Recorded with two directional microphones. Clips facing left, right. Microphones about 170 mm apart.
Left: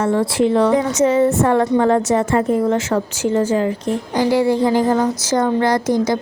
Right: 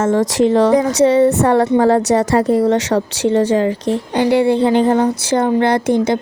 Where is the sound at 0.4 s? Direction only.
35° right (ahead or behind).